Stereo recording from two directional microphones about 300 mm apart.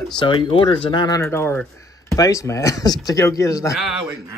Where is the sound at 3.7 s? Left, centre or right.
Centre.